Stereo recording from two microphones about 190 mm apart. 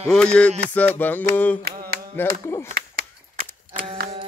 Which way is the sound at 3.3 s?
55° right (ahead or behind).